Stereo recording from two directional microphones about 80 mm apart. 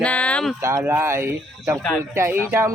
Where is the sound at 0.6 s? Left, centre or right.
Right.